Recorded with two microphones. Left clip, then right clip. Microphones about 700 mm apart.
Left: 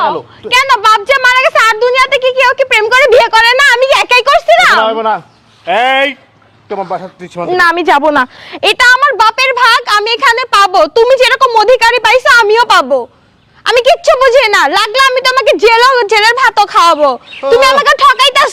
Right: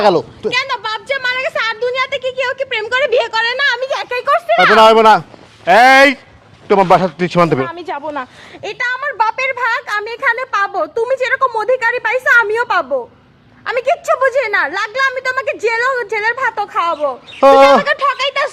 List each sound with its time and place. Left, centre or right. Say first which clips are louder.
0.7 s a sound: left 12 dB; left
1.7 s speech: left 9 dB; left
4.8 s speech: right 4 dB; right
7.6 s a woman's voice: left 14 dB; left
15.4 s a woman's voice: left 11 dB; left
17.8 s a woman's voice: left 9 dB; left